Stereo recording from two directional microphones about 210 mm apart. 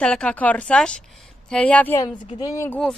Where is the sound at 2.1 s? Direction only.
20° left (ahead or behind).